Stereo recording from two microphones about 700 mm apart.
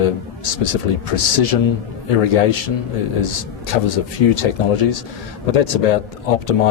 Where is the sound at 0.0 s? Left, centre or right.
Left.